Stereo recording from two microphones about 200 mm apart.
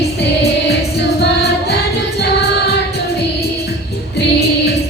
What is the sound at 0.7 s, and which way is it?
Music, 55° left (ahead or behind).